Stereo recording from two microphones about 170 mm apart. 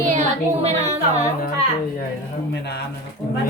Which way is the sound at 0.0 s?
45° right (ahead or behind).